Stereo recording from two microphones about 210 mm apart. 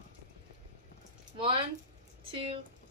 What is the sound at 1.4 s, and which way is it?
Speech, 25° right (ahead or behind).